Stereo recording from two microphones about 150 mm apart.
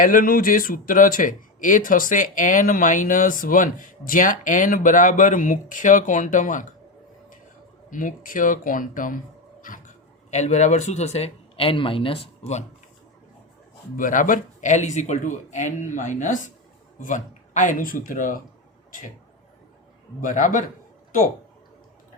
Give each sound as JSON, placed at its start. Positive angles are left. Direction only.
{"t": 0.0, "sound": "speech", "side_deg": 70}
{"t": 7.9, "sound": "speech", "side_deg": 60}
{"t": 9.6, "sound": "a sound", "side_deg": 65}
{"t": 10.3, "sound": "speech", "side_deg": 50}
{"t": 13.9, "sound": "speech", "side_deg": 60}
{"t": 20.2, "sound": "speech", "side_deg": 60}